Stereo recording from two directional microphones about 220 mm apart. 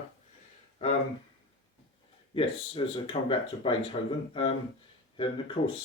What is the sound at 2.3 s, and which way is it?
Speech, 25° left (ahead or behind).